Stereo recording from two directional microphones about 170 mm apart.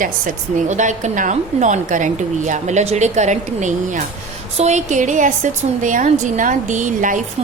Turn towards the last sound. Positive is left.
turn(degrees=-50)  # may be behind; listen again after turning